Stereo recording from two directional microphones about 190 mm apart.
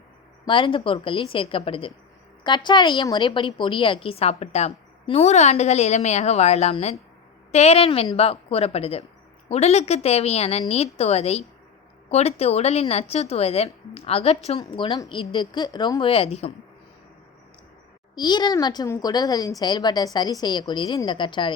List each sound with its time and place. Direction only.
0.4 s a woman's voice: 25° left (ahead or behind)
18.1 s speech: 20° left (ahead or behind)